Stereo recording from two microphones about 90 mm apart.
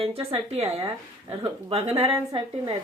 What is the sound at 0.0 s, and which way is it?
A woman's voice, 90° right.